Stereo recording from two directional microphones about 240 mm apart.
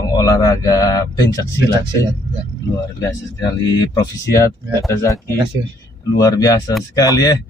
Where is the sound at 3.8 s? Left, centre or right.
Centre.